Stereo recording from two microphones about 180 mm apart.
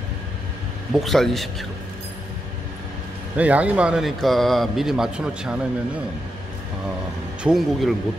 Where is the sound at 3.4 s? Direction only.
10° right (ahead or behind).